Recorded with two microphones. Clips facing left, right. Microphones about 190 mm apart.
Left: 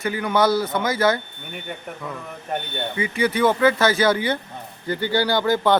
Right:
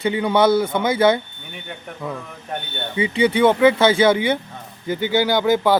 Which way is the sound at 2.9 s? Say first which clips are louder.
Right 5 dB; 25° right (ahead or behind).